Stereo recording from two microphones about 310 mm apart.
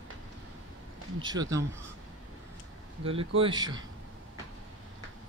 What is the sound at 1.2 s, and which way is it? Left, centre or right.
Speech, centre.